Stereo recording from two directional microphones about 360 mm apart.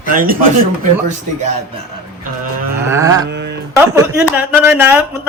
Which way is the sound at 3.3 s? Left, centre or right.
Right.